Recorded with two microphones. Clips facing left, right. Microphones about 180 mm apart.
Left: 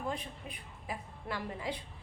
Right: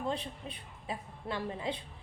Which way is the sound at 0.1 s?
25° right (ahead or behind).